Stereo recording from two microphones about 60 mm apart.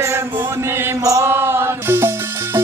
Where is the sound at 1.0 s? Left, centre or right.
Right.